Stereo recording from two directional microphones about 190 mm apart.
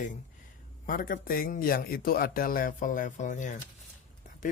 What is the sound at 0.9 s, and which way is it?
Speech, 45° left (ahead or behind).